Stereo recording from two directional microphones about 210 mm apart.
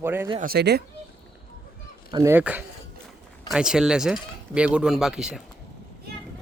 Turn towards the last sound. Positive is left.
turn(degrees=-5)  # may be behind; listen again after turning